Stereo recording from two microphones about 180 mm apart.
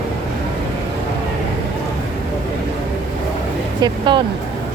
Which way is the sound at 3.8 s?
25° right (ahead or behind).